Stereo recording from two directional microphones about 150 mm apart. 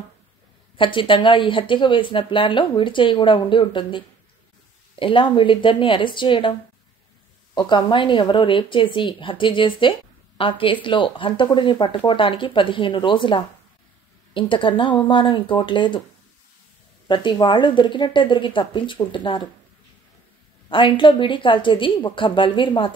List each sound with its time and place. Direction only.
0.7 s a woman's voice: 35° left (ahead or behind)
7.5 s a woman's voice: 30° left (ahead or behind)
17.1 s a woman's voice: 30° left (ahead or behind)
20.6 s a woman's voice: 35° left (ahead or behind)